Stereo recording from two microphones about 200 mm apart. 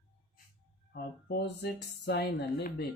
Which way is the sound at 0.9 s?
50° left (ahead or behind).